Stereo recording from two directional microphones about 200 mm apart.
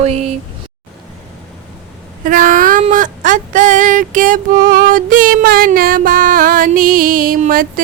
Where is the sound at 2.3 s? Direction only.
40° right (ahead or behind).